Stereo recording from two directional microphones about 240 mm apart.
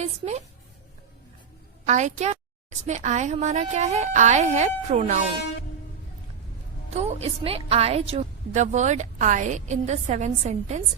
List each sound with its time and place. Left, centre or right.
0.0 s a woman's voice: right
1.9 s a woman's voice: right
6.9 s a woman's voice: right